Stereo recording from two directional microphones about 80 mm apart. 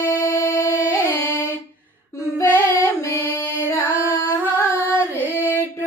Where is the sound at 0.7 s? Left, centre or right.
Left.